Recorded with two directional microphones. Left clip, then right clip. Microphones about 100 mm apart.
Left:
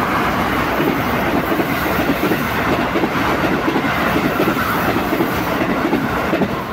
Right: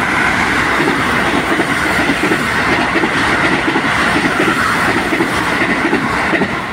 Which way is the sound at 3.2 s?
20° right (ahead or behind).